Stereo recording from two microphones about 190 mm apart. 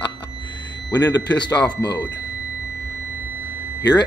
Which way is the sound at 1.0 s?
20° left (ahead or behind).